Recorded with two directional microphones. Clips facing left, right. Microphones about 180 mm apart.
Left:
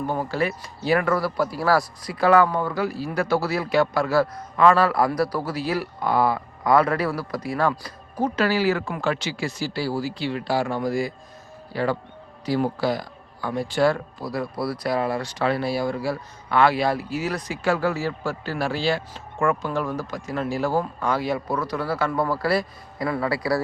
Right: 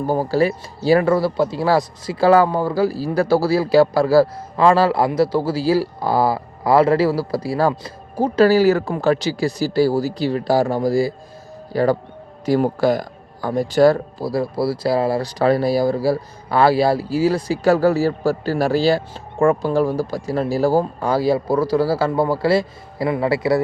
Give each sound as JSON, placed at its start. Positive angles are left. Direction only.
{"t": 0.0, "sound": "speech", "side_deg": -35}